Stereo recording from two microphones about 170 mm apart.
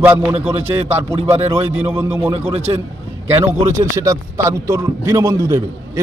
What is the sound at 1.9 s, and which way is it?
Speech, 15° right (ahead or behind).